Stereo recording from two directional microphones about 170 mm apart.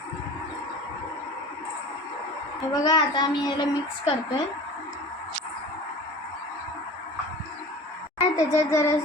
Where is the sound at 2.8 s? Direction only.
25° left (ahead or behind).